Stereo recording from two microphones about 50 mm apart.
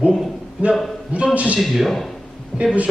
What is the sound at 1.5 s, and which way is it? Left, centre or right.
A man's voice, centre.